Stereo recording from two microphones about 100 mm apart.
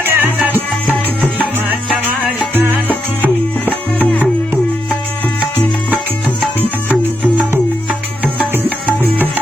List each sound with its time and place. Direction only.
0.0 s music: 20° right (ahead or behind)
2.6 s salsa music: 20° right (ahead or behind)
7.9 s music: 15° right (ahead or behind)